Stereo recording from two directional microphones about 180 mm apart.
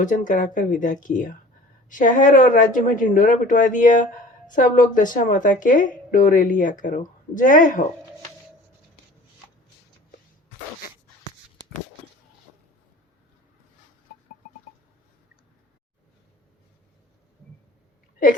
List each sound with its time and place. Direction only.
0.0 s a woman's voice: 45° left (ahead or behind)